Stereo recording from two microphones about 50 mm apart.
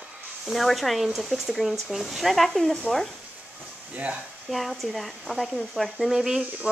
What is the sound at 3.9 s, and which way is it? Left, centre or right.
Speech, right.